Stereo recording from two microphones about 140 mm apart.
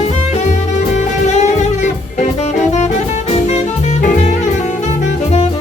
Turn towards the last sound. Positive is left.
turn(degrees=60)  # may be behind; listen again after turning